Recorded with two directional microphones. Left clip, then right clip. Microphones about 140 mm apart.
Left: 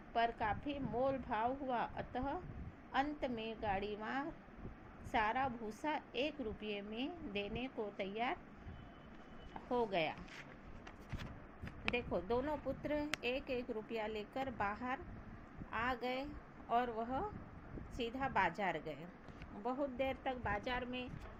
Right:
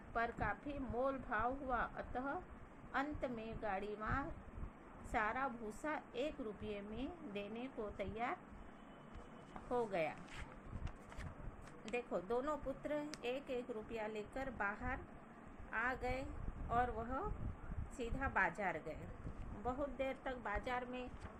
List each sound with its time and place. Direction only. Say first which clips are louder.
0.1 s a woman's voice: left 4 dB; 20° left (ahead or behind)
9.6 s a woman's voice: left 2 dB; 20° left (ahead or behind)
13.0 s a woman's voice: left 4 dB; 25° left (ahead or behind)